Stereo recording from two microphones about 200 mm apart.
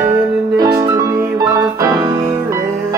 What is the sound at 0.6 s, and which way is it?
Music, 15° right (ahead or behind).